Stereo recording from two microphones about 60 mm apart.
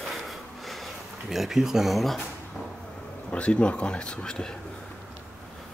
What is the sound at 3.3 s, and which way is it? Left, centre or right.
Speech, centre.